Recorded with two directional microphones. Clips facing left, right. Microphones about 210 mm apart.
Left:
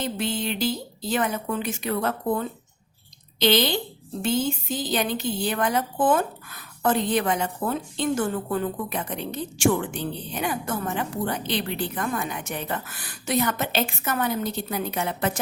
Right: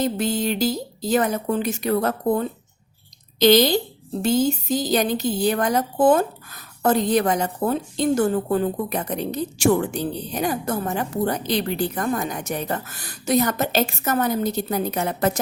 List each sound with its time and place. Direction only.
0.0 s speech: 40° right (ahead or behind)